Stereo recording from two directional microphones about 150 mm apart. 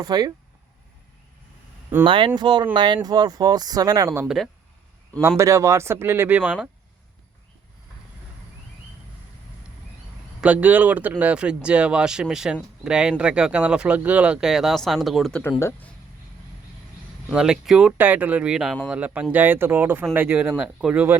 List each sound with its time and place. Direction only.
0.0 s speech: 25° right (ahead or behind)
2.0 s speech: 35° right (ahead or behind); by 4.3 s 20° right (ahead or behind)
5.4 s speech: 20° right (ahead or behind)
10.4 s speech: 10° right (ahead or behind)
15.4 s speech: 15° left (ahead or behind)
17.2 s speech: 5° right (ahead or behind)